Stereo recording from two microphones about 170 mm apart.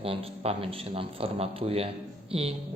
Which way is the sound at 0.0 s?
35° right (ahead or behind).